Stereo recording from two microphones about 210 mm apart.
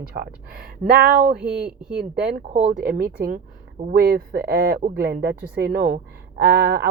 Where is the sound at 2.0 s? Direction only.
55° right (ahead or behind).